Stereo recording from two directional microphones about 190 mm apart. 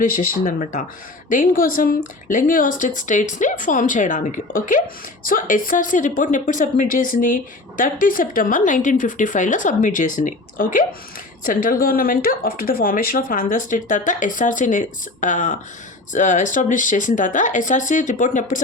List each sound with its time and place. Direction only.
0.0 s a woman's voice: 45° left (ahead or behind)